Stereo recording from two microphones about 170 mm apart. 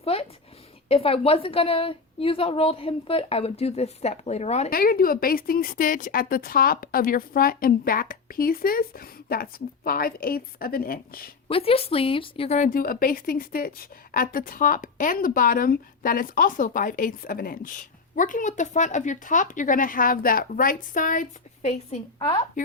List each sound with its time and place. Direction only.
0.0 s a woman's voice: 35° left (ahead or behind)
4.7 s speech: 60° left (ahead or behind)
11.4 s a woman's voice: 35° left (ahead or behind)
12.5 s a woman's voice: 50° left (ahead or behind)